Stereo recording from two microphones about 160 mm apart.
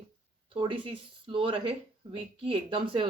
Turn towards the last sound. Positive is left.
turn(degrees=-35)  # may be behind; listen again after turning